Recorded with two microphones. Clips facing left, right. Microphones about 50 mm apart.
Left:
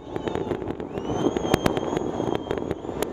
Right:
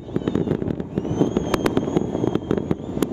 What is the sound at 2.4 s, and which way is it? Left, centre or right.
Fireworks, centre.